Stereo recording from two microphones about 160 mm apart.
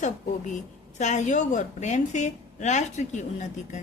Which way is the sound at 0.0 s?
50° left (ahead or behind).